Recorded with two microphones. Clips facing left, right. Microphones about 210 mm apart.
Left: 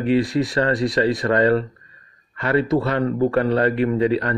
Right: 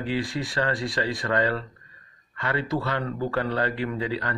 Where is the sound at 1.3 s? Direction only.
40° left (ahead or behind).